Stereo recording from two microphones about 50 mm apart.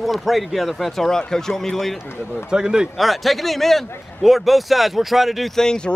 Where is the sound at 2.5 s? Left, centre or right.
Centre.